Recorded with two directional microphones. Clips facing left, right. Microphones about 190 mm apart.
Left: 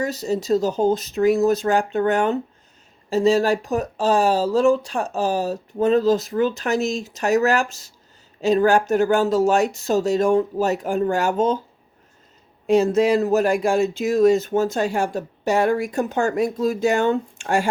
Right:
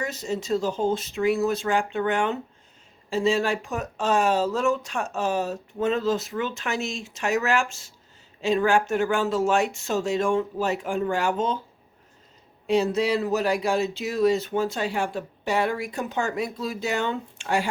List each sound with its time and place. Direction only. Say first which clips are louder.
0.0 s speech: left 6 dB; 40° left (ahead or behind)
12.6 s speech: left 6 dB; 45° left (ahead or behind)